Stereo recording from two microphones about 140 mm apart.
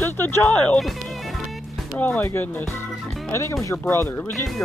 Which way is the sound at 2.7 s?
20° left (ahead or behind).